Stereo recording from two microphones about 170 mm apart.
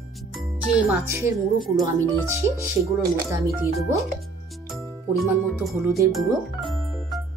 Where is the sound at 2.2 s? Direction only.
15° right (ahead or behind).